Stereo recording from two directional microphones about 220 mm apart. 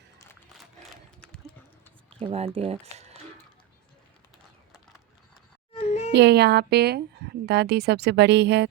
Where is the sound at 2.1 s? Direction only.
25° right (ahead or behind).